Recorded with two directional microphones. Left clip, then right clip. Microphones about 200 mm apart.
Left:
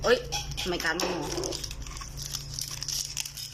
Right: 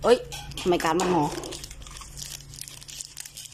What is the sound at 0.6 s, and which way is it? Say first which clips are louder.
Speech: right 7 dB; 20° right (ahead or behind).